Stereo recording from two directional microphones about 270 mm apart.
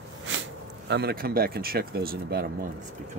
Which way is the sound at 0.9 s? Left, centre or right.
Right.